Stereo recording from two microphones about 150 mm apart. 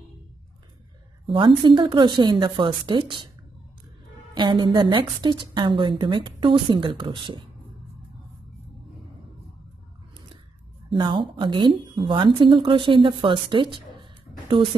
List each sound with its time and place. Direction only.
1.2 s speech: 35° right (ahead or behind)
4.4 s speech: 30° right (ahead or behind)
10.9 s speech: 35° right (ahead or behind)